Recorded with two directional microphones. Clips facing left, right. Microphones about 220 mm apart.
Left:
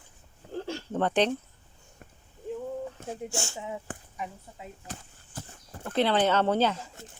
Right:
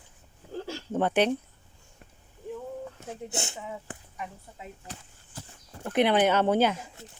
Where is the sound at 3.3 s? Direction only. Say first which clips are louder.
Even; 20° right (ahead or behind).